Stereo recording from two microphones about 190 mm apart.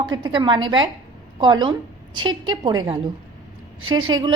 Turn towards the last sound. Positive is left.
turn(degrees=-25)  # may be behind; listen again after turning